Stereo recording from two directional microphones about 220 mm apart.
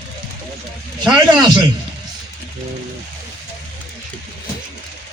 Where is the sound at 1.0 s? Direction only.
5° right (ahead or behind).